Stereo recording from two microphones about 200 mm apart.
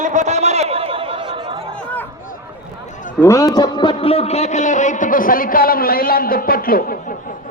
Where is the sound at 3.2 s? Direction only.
15° left (ahead or behind); by 7.1 s 45° left (ahead or behind).